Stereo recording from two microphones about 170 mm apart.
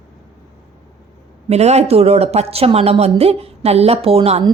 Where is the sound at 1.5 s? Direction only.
40° right (ahead or behind).